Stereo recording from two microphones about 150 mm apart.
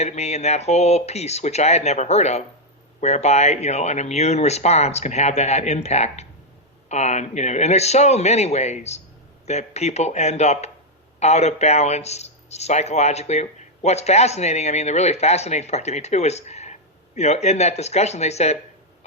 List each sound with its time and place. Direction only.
0.0 s speech: 45° left (ahead or behind)